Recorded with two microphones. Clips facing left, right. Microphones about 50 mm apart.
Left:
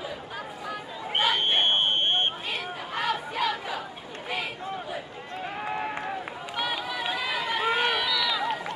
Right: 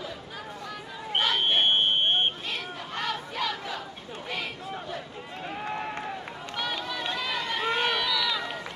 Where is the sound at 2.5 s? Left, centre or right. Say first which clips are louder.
Left 2 dB; centre.